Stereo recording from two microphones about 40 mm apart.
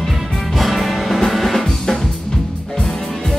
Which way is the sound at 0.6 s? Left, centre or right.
Centre.